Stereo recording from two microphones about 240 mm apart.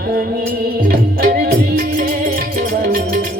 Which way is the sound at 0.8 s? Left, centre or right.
Right.